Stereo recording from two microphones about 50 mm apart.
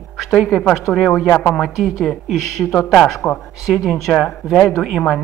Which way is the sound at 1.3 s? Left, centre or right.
Left.